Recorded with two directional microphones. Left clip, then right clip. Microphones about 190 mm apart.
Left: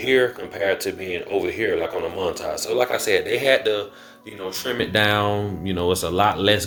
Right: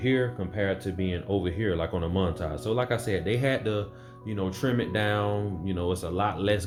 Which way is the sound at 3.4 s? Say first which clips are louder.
Left 9 dB; 25° left (ahead or behind).